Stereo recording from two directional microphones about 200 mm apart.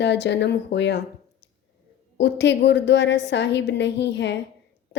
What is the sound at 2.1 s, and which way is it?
A woman's voice, 60° left (ahead or behind).